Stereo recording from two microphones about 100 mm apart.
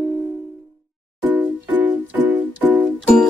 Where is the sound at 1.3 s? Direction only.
15° right (ahead or behind).